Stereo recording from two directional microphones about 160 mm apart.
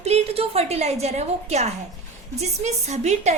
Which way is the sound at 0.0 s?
40° right (ahead or behind).